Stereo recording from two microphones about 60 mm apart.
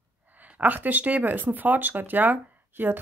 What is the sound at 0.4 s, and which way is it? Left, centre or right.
Speech, right.